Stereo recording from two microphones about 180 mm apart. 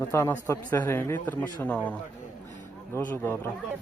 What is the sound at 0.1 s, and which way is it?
A man's voice, 15° left (ahead or behind).